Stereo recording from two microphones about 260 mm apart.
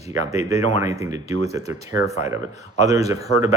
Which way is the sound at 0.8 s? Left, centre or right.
Centre.